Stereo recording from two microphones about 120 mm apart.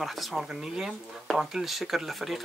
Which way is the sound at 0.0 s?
5° right (ahead or behind).